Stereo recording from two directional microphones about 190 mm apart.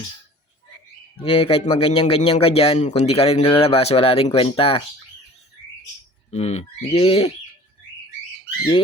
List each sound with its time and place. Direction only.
1.2 s a man's voice: 30° left (ahead or behind)
6.3 s a man's voice: 35° left (ahead or behind)